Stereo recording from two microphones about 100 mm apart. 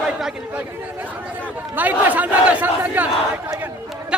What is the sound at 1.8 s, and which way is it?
Speech, 15° right (ahead or behind).